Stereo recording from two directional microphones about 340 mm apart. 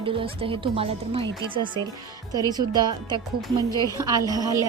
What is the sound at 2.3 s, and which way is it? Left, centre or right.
Speech, centre.